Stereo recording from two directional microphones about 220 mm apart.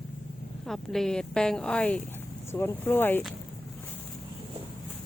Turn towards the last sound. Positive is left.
turn(degrees=10)  # may be behind; listen again after turning